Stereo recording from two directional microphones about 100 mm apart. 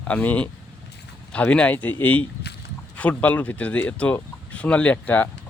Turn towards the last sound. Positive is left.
turn(degrees=15)  # may be behind; listen again after turning